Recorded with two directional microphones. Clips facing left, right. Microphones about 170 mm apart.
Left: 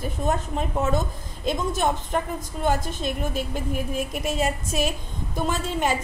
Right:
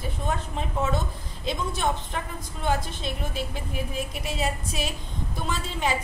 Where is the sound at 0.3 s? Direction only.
45° left (ahead or behind).